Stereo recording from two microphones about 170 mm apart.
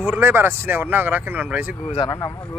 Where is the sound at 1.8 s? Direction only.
30° left (ahead or behind).